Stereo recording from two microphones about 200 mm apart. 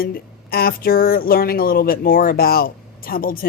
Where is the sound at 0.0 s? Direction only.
50° left (ahead or behind).